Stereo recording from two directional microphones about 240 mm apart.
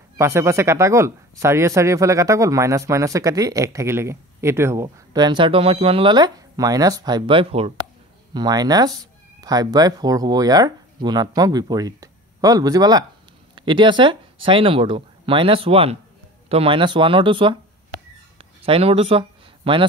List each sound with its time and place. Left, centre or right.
0.2 s speech: centre
18.7 s speech: right